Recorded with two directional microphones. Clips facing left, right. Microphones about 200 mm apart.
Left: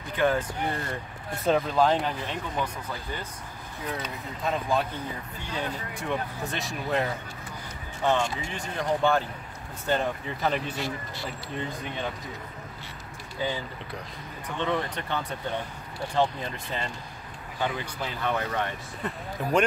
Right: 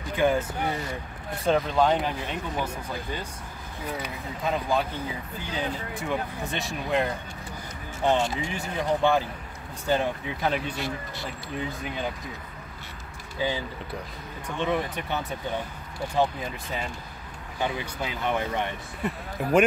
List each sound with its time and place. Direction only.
0.1 s speech: 10° right (ahead or behind)
3.8 s speech: 5° right (ahead or behind)
8.0 s speech: 15° right (ahead or behind)
8.7 s speech: centre (ahead or behind)
14.6 s speech: 10° right (ahead or behind)